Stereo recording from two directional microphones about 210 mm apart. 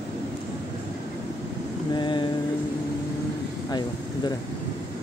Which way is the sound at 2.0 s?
20° left (ahead or behind).